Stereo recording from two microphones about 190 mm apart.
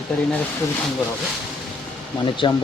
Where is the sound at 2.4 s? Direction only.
25° left (ahead or behind).